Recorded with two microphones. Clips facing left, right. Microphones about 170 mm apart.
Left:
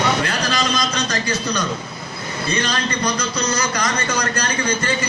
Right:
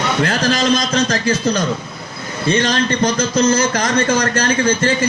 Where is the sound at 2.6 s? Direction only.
50° right (ahead or behind).